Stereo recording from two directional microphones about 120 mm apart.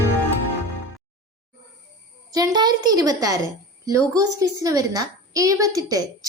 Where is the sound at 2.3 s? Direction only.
30° right (ahead or behind).